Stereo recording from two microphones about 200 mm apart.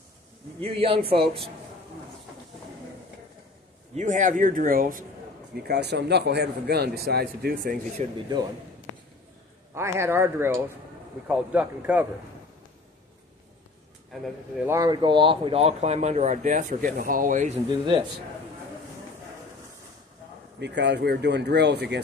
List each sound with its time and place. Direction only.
0.6 s a man's voice: 30° right (ahead or behind)
3.9 s speech: 40° right (ahead or behind)
5.7 s speech: 55° right (ahead or behind)
9.8 s speech: 15° right (ahead or behind)
14.7 s speech: 20° right (ahead or behind); by 17.5 s 40° right (ahead or behind)
20.5 s speech: 60° right (ahead or behind)